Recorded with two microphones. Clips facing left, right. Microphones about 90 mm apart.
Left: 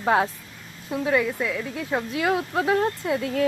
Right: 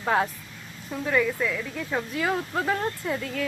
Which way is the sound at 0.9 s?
15° left (ahead or behind).